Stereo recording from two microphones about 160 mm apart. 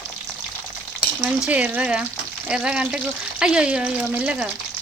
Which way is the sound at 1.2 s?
5° right (ahead or behind).